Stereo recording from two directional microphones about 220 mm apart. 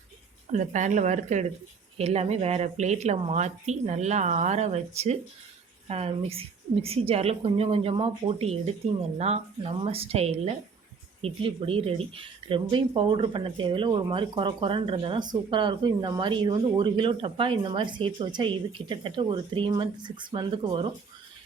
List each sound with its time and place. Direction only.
0.5 s speech: 35° right (ahead or behind)